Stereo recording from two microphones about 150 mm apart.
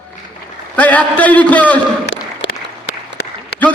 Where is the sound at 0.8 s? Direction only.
10° left (ahead or behind).